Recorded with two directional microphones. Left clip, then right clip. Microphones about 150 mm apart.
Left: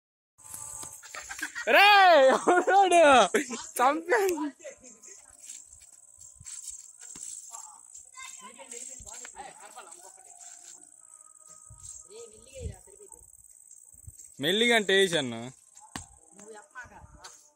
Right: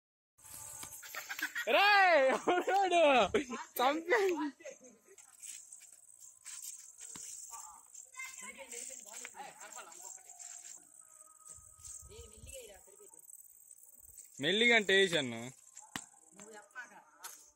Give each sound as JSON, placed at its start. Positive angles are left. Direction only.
{"t": 0.9, "sound": "music", "side_deg": -15}
{"t": 1.7, "sound": "speech", "side_deg": 15}
{"t": 3.2, "sound": "speech", "side_deg": -5}
{"t": 7.2, "sound": "a sound", "side_deg": 0}
{"t": 8.1, "sound": "snake", "side_deg": -10}
{"t": 9.3, "sound": "snake", "side_deg": 0}
{"t": 10.1, "sound": "music", "side_deg": 0}
{"t": 14.3, "sound": "speech", "side_deg": 5}
{"t": 16.4, "sound": "a sound", "side_deg": -20}
{"t": 17.2, "sound": "a sound", "side_deg": 0}